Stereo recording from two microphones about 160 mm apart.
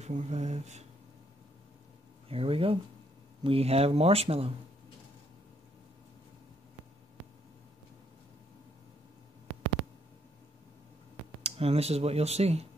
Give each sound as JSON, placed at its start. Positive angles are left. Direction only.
{"t": 0.0, "sound": "speech", "side_deg": -45}
{"t": 2.2, "sound": "speech", "side_deg": -35}
{"t": 11.4, "sound": "speech", "side_deg": -40}